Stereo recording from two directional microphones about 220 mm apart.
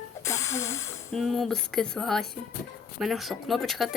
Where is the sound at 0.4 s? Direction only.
65° left (ahead or behind).